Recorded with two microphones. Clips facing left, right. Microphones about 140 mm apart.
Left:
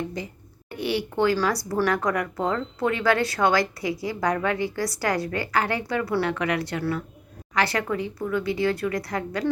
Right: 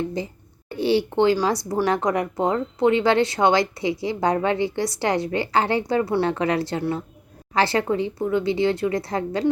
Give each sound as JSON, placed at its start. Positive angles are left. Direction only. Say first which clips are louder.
{"t": 0.2, "sound": "speech", "louder": "right 5 dB", "side_deg": -25}